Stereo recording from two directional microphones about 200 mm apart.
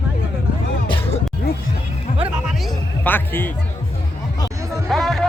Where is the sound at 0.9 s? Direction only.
30° left (ahead or behind).